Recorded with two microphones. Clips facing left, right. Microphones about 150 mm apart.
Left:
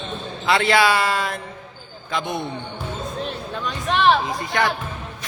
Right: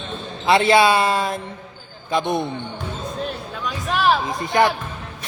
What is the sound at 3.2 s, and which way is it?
Speech, centre (ahead or behind).